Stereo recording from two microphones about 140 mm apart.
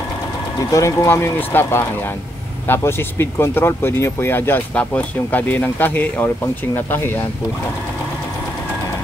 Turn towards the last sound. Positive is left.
turn(degrees=15)  # may be behind; listen again after turning